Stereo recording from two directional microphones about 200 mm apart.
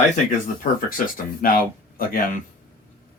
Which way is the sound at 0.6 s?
45° left (ahead or behind).